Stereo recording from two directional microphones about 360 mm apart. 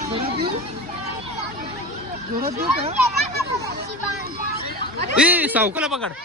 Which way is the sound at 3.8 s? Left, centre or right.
Right.